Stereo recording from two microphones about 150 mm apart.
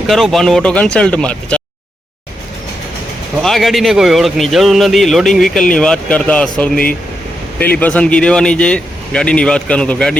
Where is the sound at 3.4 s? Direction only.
Centre (ahead or behind).